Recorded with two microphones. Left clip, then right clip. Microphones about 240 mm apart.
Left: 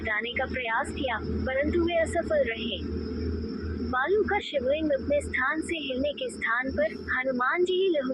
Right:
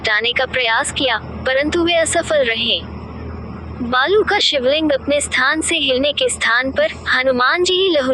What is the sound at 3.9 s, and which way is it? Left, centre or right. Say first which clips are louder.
Speech: right 11 dB; right.